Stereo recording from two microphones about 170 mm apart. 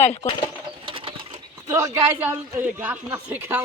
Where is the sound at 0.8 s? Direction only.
30° right (ahead or behind).